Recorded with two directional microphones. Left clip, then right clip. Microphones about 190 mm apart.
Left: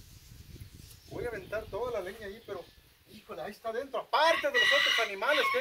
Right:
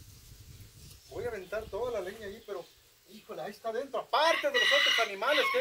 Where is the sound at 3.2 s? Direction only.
5° right (ahead or behind).